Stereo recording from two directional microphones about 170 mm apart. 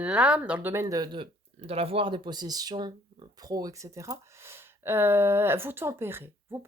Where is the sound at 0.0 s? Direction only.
5° right (ahead or behind).